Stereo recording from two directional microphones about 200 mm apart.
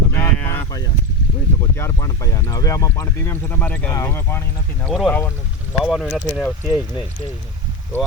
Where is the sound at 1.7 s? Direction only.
15° left (ahead or behind).